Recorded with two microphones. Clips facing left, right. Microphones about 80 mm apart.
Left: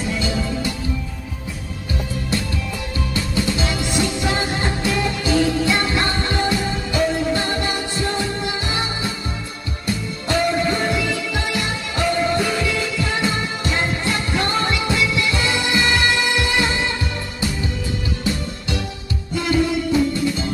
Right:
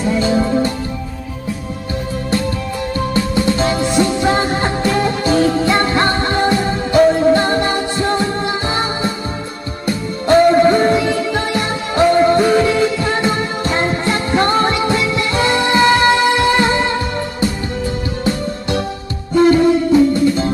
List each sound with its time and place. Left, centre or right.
0.0 s music: right
3.3 s music: right
19.3 s music: right